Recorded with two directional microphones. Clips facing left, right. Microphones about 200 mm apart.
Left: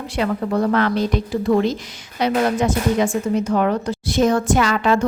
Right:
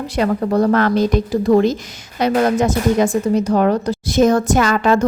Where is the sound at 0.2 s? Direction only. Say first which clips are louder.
Right 4 dB; 40° right (ahead or behind).